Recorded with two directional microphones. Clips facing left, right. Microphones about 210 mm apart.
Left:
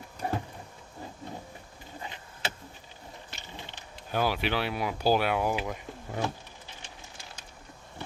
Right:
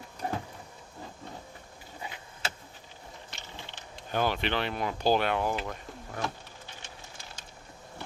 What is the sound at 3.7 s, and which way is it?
Speech, 5° left (ahead or behind).